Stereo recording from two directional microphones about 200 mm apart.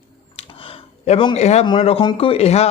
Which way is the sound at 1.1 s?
30° left (ahead or behind).